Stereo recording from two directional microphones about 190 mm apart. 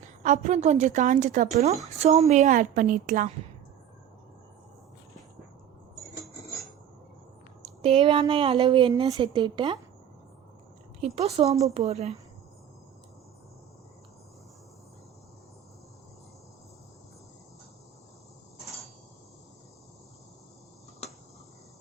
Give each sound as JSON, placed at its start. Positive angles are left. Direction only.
{"t": 0.2, "sound": "a woman's voice", "side_deg": -40}
{"t": 7.8, "sound": "speech", "side_deg": -30}
{"t": 11.0, "sound": "a woman's voice", "side_deg": -35}